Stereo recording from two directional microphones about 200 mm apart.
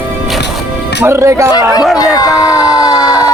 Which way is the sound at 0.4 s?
60° left (ahead or behind).